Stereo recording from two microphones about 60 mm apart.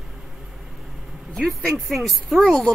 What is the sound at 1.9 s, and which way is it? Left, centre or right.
Speech, centre.